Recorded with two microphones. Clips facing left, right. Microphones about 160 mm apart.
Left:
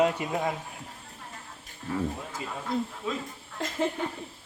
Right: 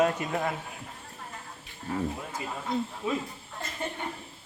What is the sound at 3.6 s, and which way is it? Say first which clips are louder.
Speech: left 6 dB; 90° left.